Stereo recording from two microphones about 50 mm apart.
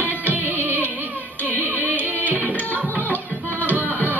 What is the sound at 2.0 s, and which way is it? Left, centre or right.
Music, right.